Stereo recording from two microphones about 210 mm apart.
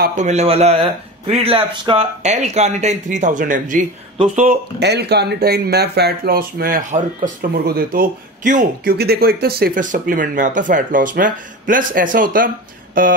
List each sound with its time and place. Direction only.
0.0 s speech: 35° right (ahead or behind)
4.7 s speech: 50° right (ahead or behind)